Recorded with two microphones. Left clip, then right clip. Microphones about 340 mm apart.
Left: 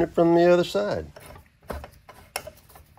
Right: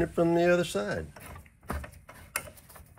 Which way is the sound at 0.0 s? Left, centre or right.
Left.